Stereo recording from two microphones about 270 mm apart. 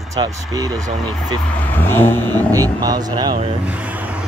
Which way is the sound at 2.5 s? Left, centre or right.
Centre.